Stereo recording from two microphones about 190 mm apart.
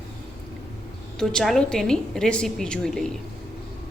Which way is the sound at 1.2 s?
5° left (ahead or behind).